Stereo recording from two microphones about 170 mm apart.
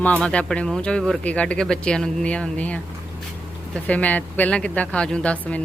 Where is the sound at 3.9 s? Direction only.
10° left (ahead or behind).